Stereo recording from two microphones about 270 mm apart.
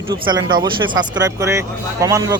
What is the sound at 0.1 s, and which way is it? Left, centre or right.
Speech, centre.